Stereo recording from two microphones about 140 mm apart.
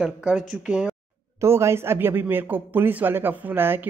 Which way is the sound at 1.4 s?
20° right (ahead or behind).